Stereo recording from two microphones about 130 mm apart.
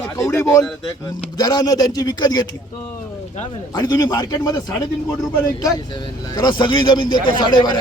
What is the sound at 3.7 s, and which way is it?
Speech, 30° left (ahead or behind).